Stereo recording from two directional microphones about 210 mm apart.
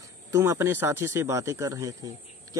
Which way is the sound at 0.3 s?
10° right (ahead or behind).